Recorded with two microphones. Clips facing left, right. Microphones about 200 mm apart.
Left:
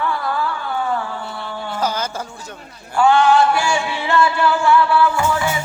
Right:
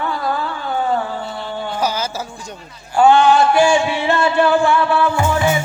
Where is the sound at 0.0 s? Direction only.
20° right (ahead or behind).